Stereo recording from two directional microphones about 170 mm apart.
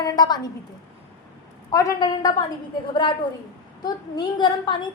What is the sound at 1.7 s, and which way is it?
A woman's voice, 20° left (ahead or behind).